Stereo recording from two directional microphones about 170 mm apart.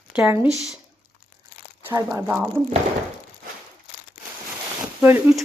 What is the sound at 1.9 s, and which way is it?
Speech, 20° right (ahead or behind).